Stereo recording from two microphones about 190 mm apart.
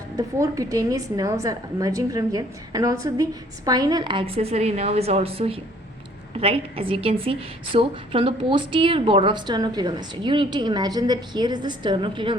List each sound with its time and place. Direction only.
0.2 s a woman's voice: 15° right (ahead or behind)